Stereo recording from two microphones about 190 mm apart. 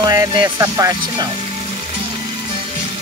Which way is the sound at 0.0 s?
20° right (ahead or behind).